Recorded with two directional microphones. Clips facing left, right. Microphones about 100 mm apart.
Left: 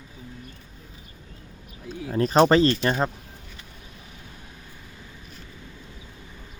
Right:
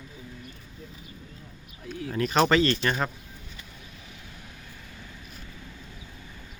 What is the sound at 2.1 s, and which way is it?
Speech, 35° left (ahead or behind).